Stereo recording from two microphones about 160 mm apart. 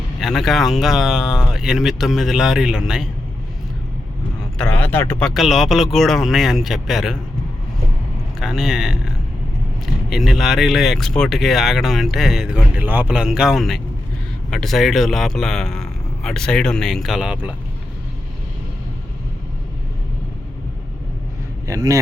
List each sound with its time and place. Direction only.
0.2 s speech: centre (ahead or behind)
4.5 s speech: 10° left (ahead or behind)
5.3 s speech: centre (ahead or behind)
8.4 s speech: centre (ahead or behind)
21.7 s a man's voice: 20° right (ahead or behind)